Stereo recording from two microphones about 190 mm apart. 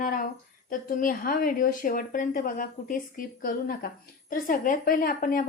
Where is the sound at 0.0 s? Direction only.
45° left (ahead or behind).